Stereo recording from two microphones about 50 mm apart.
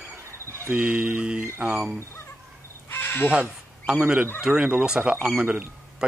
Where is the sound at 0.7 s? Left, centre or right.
Right.